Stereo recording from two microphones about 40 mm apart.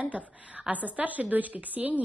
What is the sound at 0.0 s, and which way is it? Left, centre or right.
A woman's voice, right.